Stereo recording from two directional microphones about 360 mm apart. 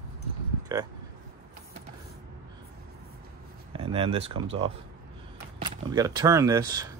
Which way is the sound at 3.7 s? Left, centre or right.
Centre.